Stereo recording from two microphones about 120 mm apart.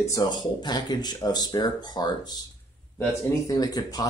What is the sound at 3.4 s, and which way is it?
Speech, 30° left (ahead or behind).